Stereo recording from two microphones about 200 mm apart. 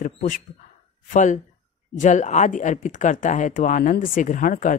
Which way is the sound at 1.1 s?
40° left (ahead or behind).